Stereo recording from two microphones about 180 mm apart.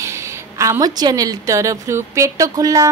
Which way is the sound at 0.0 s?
15° right (ahead or behind).